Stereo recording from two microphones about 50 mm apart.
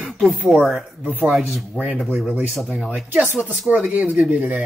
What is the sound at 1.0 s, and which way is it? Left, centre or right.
Speech, right.